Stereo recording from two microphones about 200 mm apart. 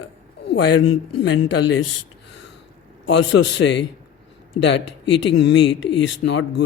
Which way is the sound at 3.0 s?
65° left (ahead or behind).